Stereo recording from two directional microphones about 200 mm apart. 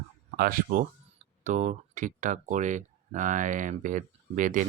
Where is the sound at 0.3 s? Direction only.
45° right (ahead or behind).